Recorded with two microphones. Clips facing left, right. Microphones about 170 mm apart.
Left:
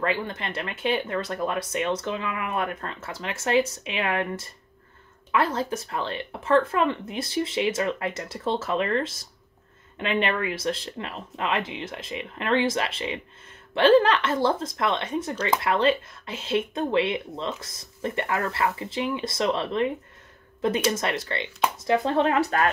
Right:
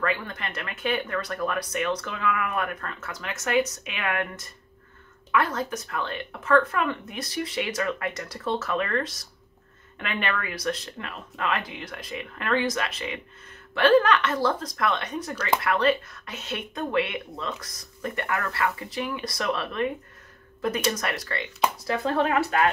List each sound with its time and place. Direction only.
0.0 s speech: 25° left (ahead or behind)
20.9 s speech: 25° left (ahead or behind)
22.4 s speech: 35° left (ahead or behind)